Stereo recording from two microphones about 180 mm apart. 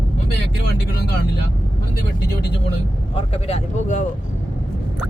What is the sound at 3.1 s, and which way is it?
Speech, 35° left (ahead or behind).